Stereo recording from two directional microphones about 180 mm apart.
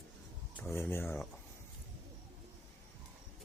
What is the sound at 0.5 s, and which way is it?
Speech, 10° left (ahead or behind).